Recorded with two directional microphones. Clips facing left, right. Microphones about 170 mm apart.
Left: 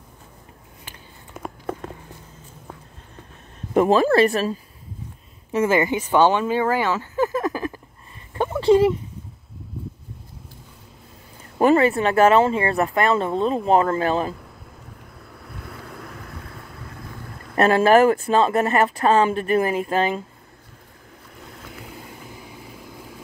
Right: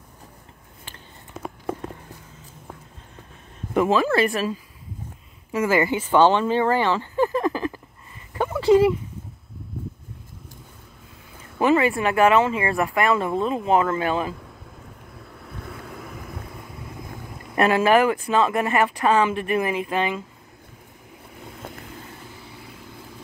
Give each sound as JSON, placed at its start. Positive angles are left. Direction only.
{"t": 3.7, "sound": "speech", "side_deg": 40}
{"t": 5.5, "sound": "speech", "side_deg": 20}
{"t": 8.4, "sound": "a sound", "side_deg": 20}
{"t": 11.6, "sound": "speech", "side_deg": 35}
{"t": 15.1, "sound": "vehicle", "side_deg": 0}
{"t": 17.6, "sound": "speech", "side_deg": 35}
{"t": 21.6, "sound": "vehicle", "side_deg": -55}
{"t": 22.3, "sound": "vehicle", "side_deg": 15}